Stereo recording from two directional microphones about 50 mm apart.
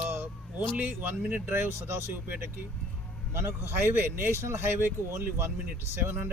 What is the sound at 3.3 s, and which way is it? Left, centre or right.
Speech, right.